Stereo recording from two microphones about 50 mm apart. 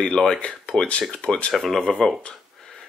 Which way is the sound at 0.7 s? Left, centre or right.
Left.